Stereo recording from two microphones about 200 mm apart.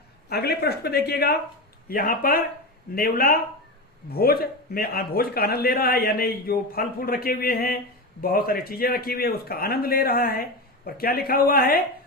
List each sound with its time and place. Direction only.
0.3 s a man's voice: 50° left (ahead or behind)